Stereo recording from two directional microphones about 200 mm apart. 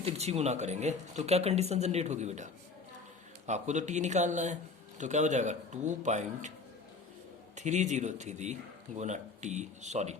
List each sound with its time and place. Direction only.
0.0 s speech: 30° right (ahead or behind)
7.5 s speech: 35° right (ahead or behind)